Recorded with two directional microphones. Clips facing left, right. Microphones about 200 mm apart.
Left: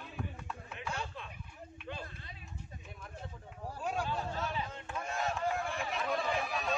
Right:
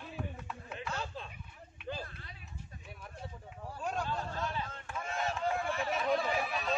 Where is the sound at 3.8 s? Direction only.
10° left (ahead or behind).